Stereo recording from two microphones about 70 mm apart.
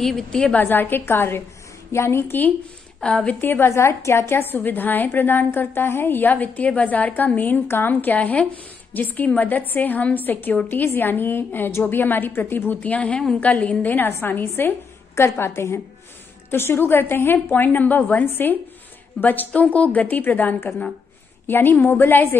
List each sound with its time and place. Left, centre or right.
0.0 s a woman's voice: centre
0.6 s a woman's voice: left
3.0 s a woman's voice: centre
3.3 s a woman's voice: left